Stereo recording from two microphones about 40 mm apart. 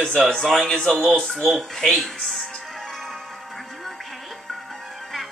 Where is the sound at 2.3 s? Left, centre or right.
Centre.